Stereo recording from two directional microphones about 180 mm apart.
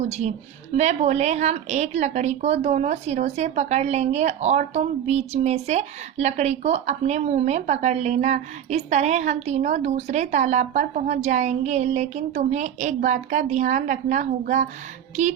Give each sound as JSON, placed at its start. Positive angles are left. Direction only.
{"t": 0.7, "sound": "speech", "side_deg": -40}
{"t": 15.1, "sound": "music", "side_deg": -40}